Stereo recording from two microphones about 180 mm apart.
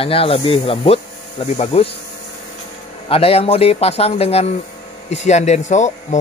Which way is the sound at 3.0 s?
30° left (ahead or behind).